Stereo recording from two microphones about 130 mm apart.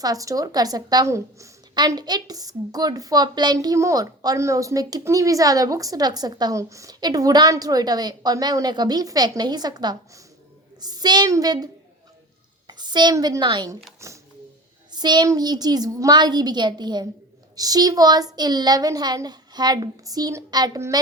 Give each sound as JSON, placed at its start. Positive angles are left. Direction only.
{"t": 0.0, "sound": "a woman's voice", "side_deg": -25}
{"t": 14.0, "sound": "a woman's voice", "side_deg": -20}
{"t": 14.9, "sound": "a woman's voice", "side_deg": -35}